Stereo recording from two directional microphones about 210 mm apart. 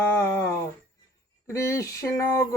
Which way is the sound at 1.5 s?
15° left (ahead or behind).